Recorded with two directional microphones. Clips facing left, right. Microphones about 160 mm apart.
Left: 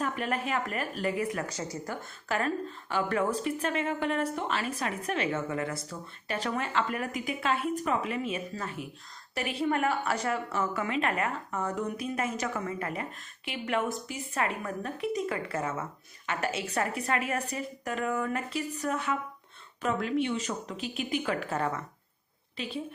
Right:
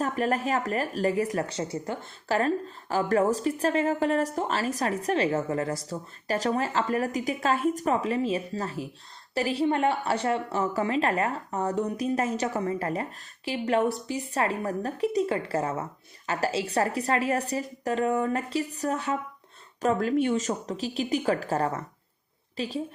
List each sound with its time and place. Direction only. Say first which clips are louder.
0.0 s a woman's voice: right 5 dB; 40° right (ahead or behind)